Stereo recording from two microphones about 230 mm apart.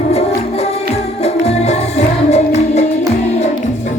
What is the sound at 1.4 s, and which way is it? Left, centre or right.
Music, left.